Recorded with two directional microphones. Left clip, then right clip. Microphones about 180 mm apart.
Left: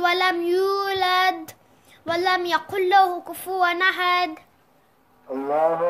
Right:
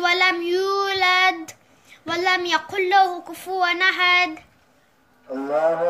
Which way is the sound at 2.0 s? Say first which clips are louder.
Right 1 dB; 40° left (ahead or behind).